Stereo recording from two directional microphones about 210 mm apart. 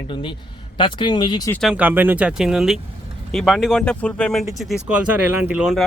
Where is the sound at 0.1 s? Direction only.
25° left (ahead or behind).